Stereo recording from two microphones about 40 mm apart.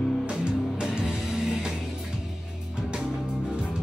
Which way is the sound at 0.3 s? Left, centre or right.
Right.